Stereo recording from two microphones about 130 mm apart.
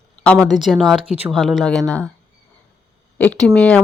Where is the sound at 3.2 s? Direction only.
5° left (ahead or behind).